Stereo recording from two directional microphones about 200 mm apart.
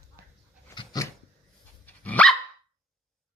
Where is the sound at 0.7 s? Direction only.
20° left (ahead or behind).